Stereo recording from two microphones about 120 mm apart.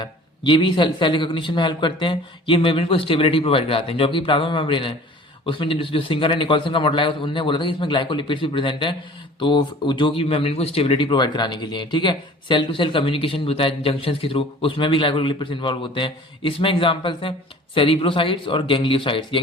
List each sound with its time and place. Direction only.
0.0 s speech: 40° left (ahead or behind)